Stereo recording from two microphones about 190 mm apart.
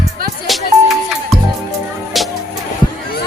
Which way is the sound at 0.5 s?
Centre (ahead or behind).